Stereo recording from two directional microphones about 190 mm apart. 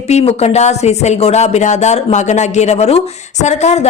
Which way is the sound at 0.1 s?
35° left (ahead or behind).